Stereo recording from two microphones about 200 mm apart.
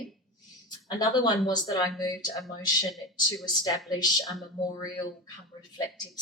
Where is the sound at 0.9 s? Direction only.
20° left (ahead or behind).